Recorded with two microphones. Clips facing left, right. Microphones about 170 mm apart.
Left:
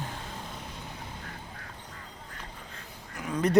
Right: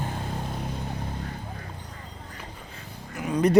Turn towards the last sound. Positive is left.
turn(degrees=-15)  # may be behind; listen again after turning